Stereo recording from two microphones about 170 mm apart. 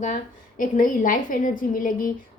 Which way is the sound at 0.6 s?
50° left (ahead or behind).